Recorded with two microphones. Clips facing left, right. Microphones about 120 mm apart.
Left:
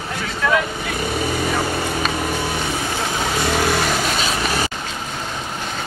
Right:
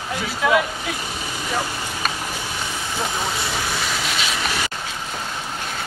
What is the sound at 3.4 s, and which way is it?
Vehicle, 65° left (ahead or behind).